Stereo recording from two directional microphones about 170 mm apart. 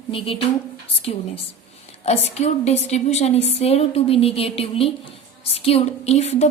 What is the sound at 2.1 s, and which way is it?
A woman's voice, 40° left (ahead or behind).